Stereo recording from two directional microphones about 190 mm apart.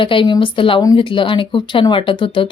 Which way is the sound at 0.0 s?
25° left (ahead or behind).